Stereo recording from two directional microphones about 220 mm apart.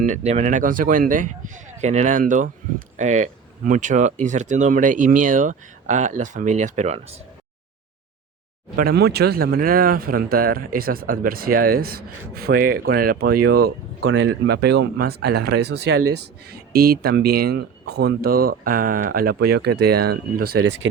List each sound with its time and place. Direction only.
0.0 s speech: 30° right (ahead or behind)
8.7 s speech: 45° right (ahead or behind)